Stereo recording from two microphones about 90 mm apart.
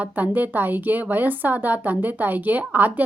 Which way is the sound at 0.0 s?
20° right (ahead or behind).